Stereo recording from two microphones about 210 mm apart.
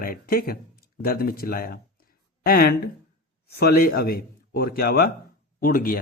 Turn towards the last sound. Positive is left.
turn(degrees=40)  # may be behind; listen again after turning